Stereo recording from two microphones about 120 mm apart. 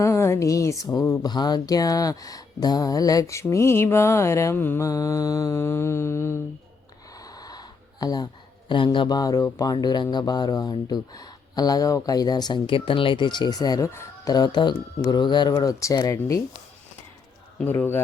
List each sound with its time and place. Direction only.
0.0 s speech: 25° left (ahead or behind)
4.9 s speech: 30° left (ahead or behind)
7.2 s a sound: 30° left (ahead or behind)
8.7 s speech: 45° left (ahead or behind); by 14.3 s 25° left (ahead or behind)
14.3 s speech: 40° left (ahead or behind)
17.6 s speech: 15° left (ahead or behind)